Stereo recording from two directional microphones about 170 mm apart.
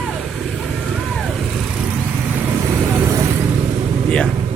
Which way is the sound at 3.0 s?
20° right (ahead or behind).